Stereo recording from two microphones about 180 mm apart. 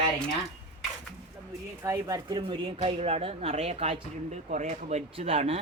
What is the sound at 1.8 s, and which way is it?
Speech, 20° right (ahead or behind).